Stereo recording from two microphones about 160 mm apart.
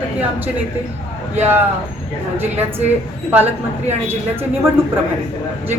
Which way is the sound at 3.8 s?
15° right (ahead or behind).